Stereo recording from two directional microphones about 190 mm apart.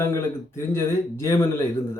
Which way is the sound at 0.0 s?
15° left (ahead or behind).